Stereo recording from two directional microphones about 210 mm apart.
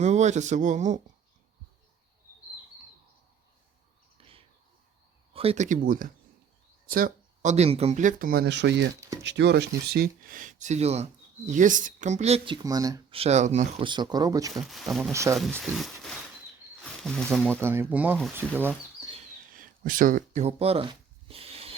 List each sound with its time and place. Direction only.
0.0 s speech: 35° right (ahead or behind)
4.2 s a sound: 25° right (ahead or behind)
5.3 s speech: 25° right (ahead or behind)
6.8 s a sound: 45° right (ahead or behind)
7.5 s speech: 30° right (ahead or behind)
13.1 s speech: 30° right (ahead or behind); by 14.5 s 15° right (ahead or behind)
14.5 s speech: centre (ahead or behind)
15.1 s speech: 15° right (ahead or behind)
15.4 s speech: centre (ahead or behind)
16.8 s snake: 5° left (ahead or behind)
17.5 s speech: 10° right (ahead or behind)
19.5 s a sound: 40° right (ahead or behind)